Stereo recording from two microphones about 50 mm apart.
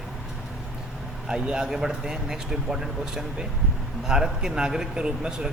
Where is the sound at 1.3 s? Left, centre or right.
Centre.